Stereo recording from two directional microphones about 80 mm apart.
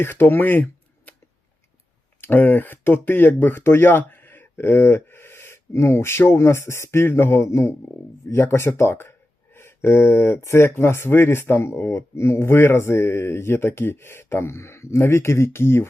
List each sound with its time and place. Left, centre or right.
0.0 s speech: left
2.2 s speech: left